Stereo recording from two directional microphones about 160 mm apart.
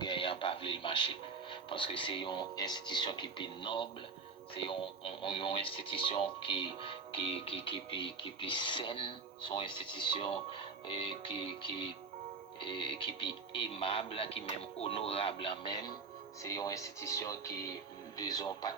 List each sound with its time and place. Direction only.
0.0 s speech: 30° left (ahead or behind)
12.5 s speech: 30° left (ahead or behind)
16.4 s speech: 20° left (ahead or behind)